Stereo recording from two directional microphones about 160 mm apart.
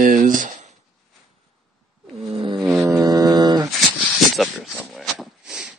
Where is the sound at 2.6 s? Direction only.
5° right (ahead or behind).